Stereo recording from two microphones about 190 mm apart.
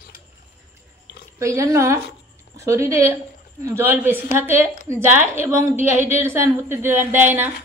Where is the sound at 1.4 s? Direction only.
15° right (ahead or behind).